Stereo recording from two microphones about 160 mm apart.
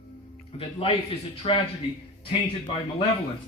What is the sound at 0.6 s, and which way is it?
Speech, 35° left (ahead or behind).